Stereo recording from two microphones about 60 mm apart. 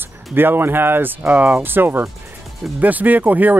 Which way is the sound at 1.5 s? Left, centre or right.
Right.